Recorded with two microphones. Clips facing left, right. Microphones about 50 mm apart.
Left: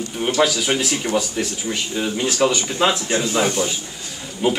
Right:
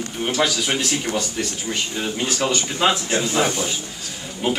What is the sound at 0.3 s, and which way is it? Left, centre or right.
Speech, centre.